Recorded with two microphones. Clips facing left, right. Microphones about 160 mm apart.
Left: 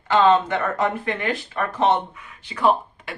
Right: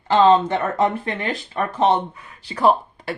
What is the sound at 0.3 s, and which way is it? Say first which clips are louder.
Speech: right 2 dB; 30° right (ahead or behind).